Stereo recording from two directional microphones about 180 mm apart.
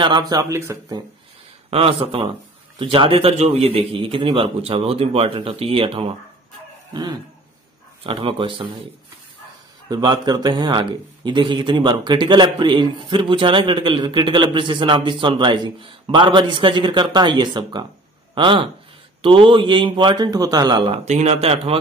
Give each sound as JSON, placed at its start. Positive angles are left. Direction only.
{"t": 0.0, "sound": "speech", "side_deg": -25}
{"t": 1.7, "sound": "a man's voice", "side_deg": -30}
{"t": 6.9, "sound": "a sound", "side_deg": -25}
{"t": 8.0, "sound": "speech", "side_deg": -30}
{"t": 9.8, "sound": "speech", "side_deg": -20}
{"t": 21.0, "sound": "a man's voice", "side_deg": -40}